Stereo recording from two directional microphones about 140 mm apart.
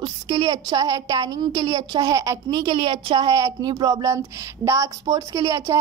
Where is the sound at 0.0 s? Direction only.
30° right (ahead or behind).